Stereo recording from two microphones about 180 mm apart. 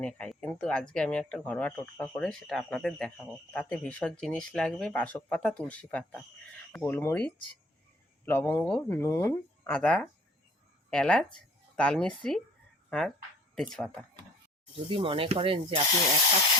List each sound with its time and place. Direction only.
0.0 s speech: 5° left (ahead or behind)
14.7 s speech: 30° right (ahead or behind)